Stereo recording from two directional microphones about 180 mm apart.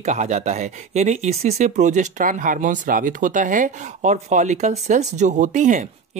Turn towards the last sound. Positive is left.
turn(degrees=-40)  # may be behind; listen again after turning